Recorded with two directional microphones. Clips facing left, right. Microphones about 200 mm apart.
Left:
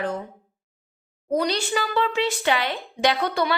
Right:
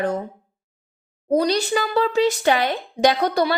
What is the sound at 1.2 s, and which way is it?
Speech, 35° right (ahead or behind).